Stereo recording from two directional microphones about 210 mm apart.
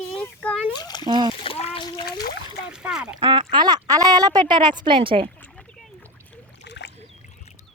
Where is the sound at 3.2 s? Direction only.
20° right (ahead or behind).